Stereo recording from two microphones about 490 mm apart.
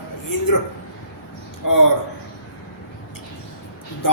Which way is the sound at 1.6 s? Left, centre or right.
Left.